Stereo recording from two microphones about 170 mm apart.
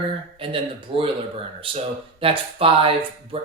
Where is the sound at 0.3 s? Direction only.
30° right (ahead or behind).